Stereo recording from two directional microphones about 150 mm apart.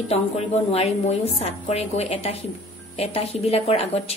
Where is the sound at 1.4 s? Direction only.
45° left (ahead or behind).